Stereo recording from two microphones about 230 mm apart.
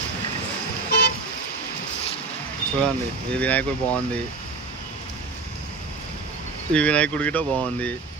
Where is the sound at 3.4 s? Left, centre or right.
Centre.